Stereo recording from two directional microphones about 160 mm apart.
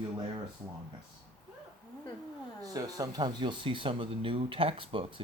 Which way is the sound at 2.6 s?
20° right (ahead or behind).